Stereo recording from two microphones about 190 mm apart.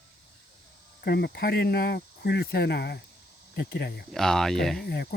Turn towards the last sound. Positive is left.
turn(degrees=0)  # may be behind; listen again after turning